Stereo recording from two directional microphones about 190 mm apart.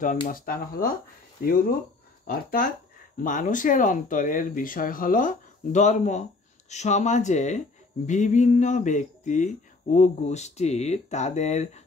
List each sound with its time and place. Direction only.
0.3 s speech: 45° left (ahead or behind)